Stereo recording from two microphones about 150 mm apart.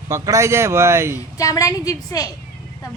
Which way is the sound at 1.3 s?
25° left (ahead or behind).